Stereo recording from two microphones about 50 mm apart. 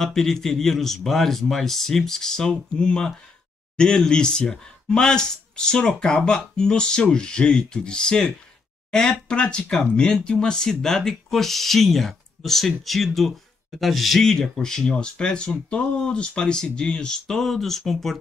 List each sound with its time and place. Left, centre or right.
0.0 s speech: centre
14.2 s speech: centre